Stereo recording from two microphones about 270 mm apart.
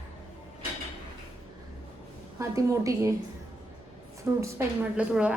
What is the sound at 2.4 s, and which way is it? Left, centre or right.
Speech, centre.